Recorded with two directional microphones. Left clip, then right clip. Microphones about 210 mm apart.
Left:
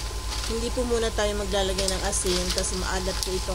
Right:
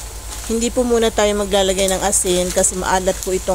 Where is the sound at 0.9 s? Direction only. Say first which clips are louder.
Right 10 dB; 30° right (ahead or behind).